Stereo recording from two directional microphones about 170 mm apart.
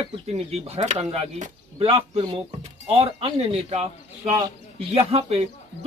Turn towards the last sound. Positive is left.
turn(degrees=-35)  # may be behind; listen again after turning